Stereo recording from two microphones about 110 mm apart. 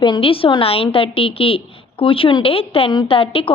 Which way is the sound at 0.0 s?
50° left (ahead or behind).